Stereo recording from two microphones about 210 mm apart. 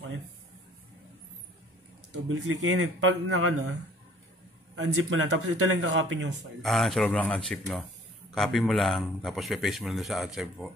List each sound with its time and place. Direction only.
2.2 s speech: 70° right (ahead or behind); by 3.7 s 90° right
4.7 s a man's voice: 85° right
6.6 s speech: centre (ahead or behind)